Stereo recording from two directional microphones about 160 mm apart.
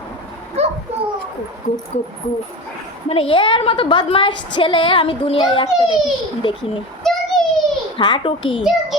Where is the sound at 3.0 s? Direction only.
35° left (ahead or behind).